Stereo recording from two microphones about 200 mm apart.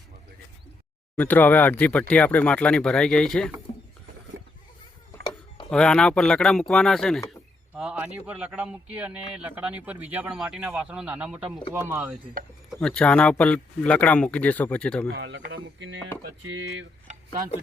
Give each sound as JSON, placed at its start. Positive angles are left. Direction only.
{"t": 1.1, "sound": "speech", "side_deg": 10}
{"t": 5.7, "sound": "a man's voice", "side_deg": 5}
{"t": 12.8, "sound": "speech", "side_deg": 5}
{"t": 15.1, "sound": "speech", "side_deg": -60}
{"t": 17.1, "sound": "a sound", "side_deg": -35}